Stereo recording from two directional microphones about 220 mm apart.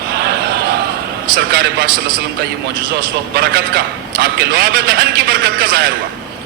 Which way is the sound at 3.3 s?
45° right (ahead or behind).